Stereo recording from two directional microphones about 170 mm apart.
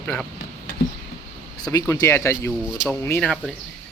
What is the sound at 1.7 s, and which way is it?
Speech, 15° left (ahead or behind).